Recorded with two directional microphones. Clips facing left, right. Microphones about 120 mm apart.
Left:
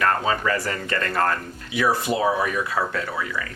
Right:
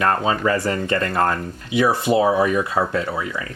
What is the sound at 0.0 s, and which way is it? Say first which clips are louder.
Speech: right 3 dB; 25° right (ahead or behind).